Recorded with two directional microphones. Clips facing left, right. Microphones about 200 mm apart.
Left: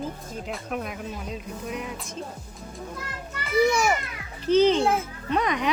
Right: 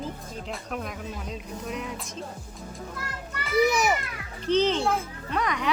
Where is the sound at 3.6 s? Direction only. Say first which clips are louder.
Left 1 dB; 20° right (ahead or behind).